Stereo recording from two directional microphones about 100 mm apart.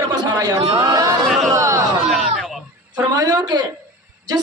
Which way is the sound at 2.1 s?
5° right (ahead or behind).